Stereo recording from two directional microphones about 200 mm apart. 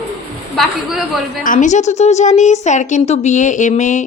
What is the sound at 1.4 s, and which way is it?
A woman's voice, 40° left (ahead or behind).